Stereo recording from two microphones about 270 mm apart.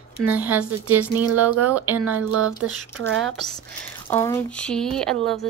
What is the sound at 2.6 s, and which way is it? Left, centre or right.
Speech, right.